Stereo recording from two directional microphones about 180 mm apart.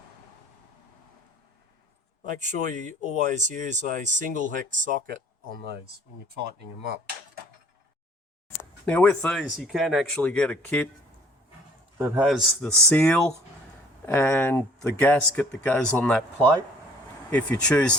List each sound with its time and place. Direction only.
2.3 s speech: 45° right (ahead or behind)
8.9 s speech: 5° left (ahead or behind)
11.9 s speech: 10° right (ahead or behind); by 17.9 s 5° left (ahead or behind)